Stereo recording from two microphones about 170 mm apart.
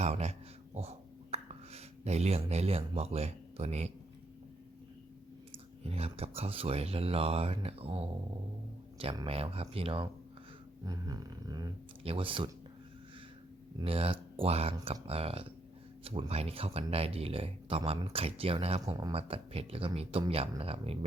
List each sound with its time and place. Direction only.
0.0 s speech: 40° right (ahead or behind)
5.5 s speech: 35° right (ahead or behind)
9.1 s speech: 35° right (ahead or behind)
10.8 s a sound: 20° right (ahead or behind)
12.0 s speech: 30° right (ahead or behind)
13.7 s speech: 35° right (ahead or behind)